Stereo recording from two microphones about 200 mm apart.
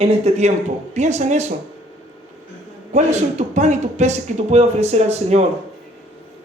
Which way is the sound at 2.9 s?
35° right (ahead or behind).